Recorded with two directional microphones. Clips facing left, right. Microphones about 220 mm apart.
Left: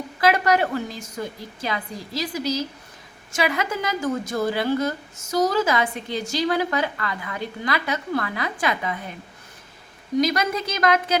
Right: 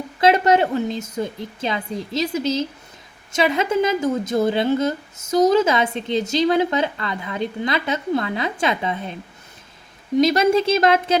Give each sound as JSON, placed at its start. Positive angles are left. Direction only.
{"t": 0.2, "sound": "a woman's voice", "side_deg": -25}
{"t": 10.2, "sound": "a woman's voice", "side_deg": -25}